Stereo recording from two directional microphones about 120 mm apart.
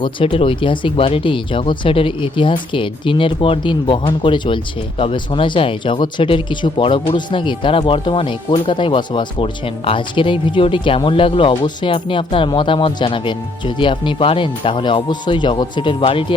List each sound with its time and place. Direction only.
0.0 s speech: 50° left (ahead or behind)